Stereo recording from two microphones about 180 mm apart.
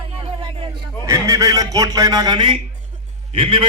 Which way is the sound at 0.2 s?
30° right (ahead or behind).